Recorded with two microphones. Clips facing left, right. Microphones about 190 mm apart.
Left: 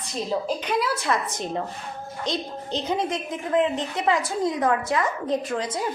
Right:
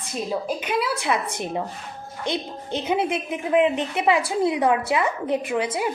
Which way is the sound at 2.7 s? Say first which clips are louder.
Right 3 dB; 10° right (ahead or behind).